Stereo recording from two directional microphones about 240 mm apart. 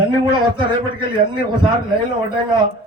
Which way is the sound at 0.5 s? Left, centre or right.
Centre.